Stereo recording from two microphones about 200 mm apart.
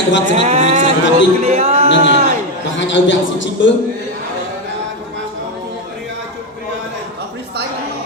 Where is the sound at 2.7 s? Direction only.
65° left (ahead or behind).